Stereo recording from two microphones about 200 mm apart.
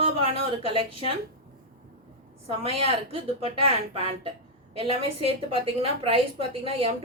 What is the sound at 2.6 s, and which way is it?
A woman's voice, 30° right (ahead or behind).